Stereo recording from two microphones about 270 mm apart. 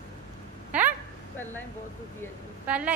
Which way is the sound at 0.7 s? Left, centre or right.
Centre.